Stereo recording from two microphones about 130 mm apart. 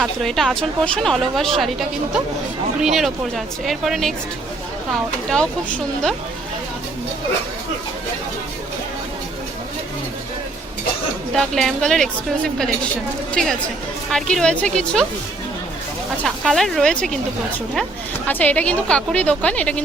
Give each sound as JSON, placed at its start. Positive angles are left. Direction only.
{"t": 0.0, "sound": "a woman's voice", "side_deg": 0}
{"t": 2.8, "sound": "a woman's voice", "side_deg": 0}
{"t": 5.3, "sound": "a woman's voice", "side_deg": 10}
{"t": 11.3, "sound": "a woman's voice", "side_deg": 5}
{"t": 13.3, "sound": "a woman's voice", "side_deg": 5}
{"t": 16.2, "sound": "a woman's voice", "side_deg": 0}
{"t": 18.3, "sound": "a woman's voice", "side_deg": 10}